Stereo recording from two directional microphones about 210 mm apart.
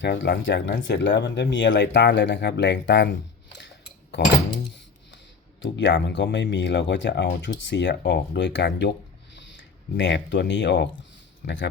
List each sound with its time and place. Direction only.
0.0 s speech: 55° left (ahead or behind)
5.6 s speech: 60° left (ahead or behind)